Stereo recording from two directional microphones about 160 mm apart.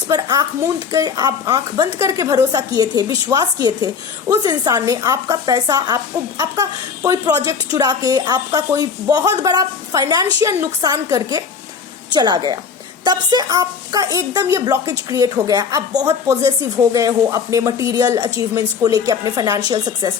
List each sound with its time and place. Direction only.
0.1 s a woman's voice: 25° right (ahead or behind)